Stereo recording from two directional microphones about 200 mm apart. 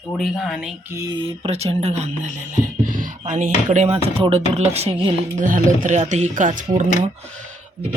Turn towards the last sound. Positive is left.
turn(degrees=-35)  # may be behind; listen again after turning